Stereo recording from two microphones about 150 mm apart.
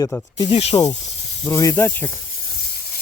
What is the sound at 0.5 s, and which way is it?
Speech, 45° left (ahead or behind).